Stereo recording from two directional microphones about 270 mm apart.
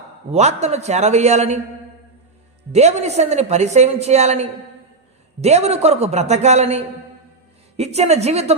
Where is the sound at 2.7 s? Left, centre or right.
Right.